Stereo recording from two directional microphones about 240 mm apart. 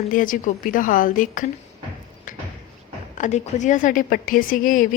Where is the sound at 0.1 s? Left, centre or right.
Left.